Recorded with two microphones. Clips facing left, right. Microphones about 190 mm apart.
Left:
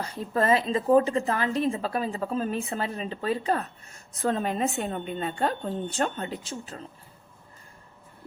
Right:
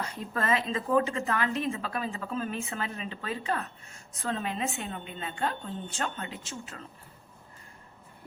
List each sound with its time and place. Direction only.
0.3 s a woman's voice: 35° left (ahead or behind)